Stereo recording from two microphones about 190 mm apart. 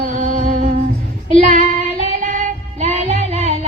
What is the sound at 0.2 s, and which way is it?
Music, 40° right (ahead or behind).